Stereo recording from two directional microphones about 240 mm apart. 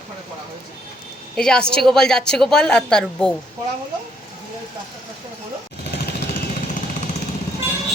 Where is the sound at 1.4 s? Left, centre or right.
Centre.